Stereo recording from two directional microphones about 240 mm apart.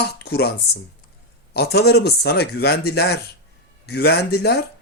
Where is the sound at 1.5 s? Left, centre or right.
Left.